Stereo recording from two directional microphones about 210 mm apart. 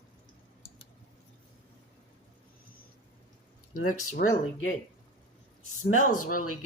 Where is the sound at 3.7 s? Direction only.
40° left (ahead or behind).